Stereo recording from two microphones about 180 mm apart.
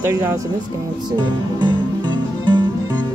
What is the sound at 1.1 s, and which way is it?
Music, 25° right (ahead or behind).